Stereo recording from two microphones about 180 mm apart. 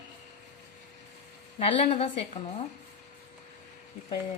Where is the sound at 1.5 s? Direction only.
35° left (ahead or behind).